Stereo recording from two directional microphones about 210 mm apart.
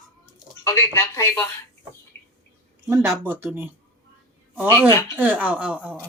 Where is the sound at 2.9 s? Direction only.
15° right (ahead or behind).